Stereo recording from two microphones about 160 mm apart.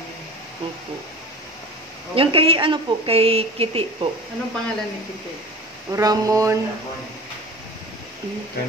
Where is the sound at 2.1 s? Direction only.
35° right (ahead or behind).